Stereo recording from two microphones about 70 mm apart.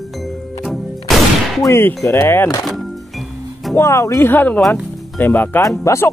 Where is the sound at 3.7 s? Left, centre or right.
Left.